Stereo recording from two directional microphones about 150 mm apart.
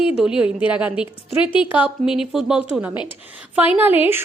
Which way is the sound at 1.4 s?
35° left (ahead or behind).